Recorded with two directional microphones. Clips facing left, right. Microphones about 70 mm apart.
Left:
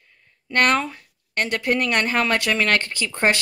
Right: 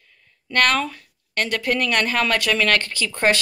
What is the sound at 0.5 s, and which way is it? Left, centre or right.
Speech, left.